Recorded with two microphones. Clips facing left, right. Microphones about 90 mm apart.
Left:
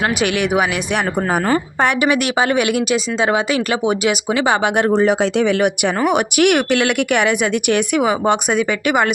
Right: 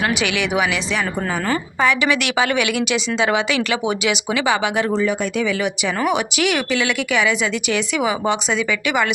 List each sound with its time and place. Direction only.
0.1 s speech: 45° left (ahead or behind)
1.8 s speech: 55° left (ahead or behind)
4.9 s speech: 70° left (ahead or behind); by 9.0 s 50° left (ahead or behind)